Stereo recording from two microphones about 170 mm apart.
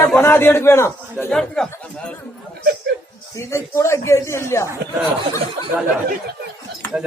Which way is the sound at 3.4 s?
15° left (ahead or behind).